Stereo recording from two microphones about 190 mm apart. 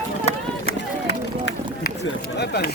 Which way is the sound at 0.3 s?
35° left (ahead or behind).